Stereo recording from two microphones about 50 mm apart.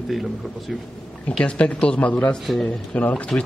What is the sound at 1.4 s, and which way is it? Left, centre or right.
Speech, left.